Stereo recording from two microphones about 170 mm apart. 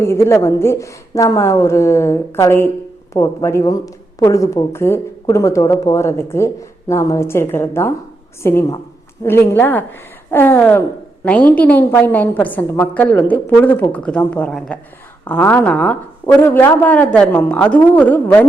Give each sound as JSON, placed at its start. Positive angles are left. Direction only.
{"t": 0.0, "sound": "speech", "side_deg": 15}